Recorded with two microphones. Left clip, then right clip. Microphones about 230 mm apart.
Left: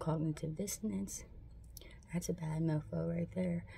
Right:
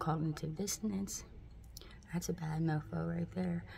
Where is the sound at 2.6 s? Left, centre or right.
Centre.